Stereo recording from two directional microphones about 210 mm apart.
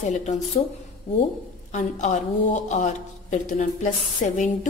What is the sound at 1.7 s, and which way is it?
A woman's voice, 35° left (ahead or behind).